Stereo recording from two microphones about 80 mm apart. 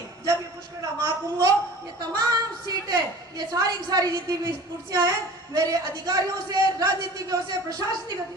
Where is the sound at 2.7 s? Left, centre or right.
Right.